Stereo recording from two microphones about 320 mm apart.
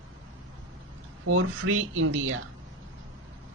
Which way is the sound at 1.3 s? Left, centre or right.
Right.